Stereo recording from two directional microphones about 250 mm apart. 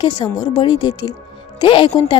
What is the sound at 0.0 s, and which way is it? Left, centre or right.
A woman's voice, centre.